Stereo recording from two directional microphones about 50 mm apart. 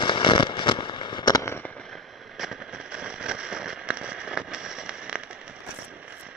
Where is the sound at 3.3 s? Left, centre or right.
Centre.